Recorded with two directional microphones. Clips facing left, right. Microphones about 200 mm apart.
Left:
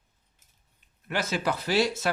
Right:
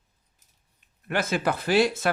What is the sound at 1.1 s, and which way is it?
Speech, 55° right (ahead or behind).